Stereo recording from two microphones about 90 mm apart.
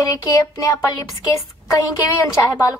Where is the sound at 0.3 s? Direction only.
40° left (ahead or behind).